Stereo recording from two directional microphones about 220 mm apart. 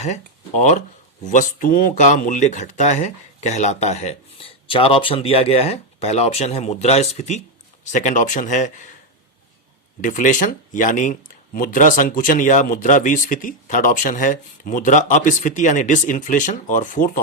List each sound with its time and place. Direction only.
0.0 s speech: 30° left (ahead or behind)
10.0 s speech: 35° left (ahead or behind)